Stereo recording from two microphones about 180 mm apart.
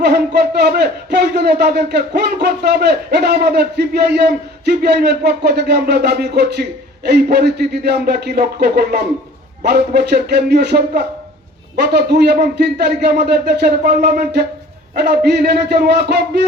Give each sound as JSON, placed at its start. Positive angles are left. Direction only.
{"t": 0.0, "sound": "a man's voice", "side_deg": -65}